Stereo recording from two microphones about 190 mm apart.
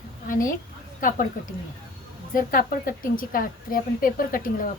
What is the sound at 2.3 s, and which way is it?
A woman's voice, 45° left (ahead or behind).